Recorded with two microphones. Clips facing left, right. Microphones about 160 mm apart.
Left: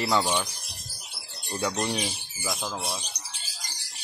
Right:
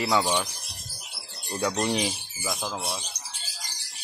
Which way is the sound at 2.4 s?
Centre (ahead or behind).